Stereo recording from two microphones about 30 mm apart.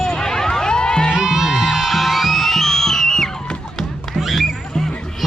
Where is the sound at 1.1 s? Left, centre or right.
Centre.